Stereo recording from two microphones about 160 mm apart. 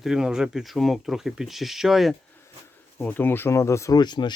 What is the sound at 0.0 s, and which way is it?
Speech, 5° right (ahead or behind).